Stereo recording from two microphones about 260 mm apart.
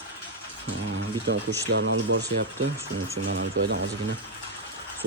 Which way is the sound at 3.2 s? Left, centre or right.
Right.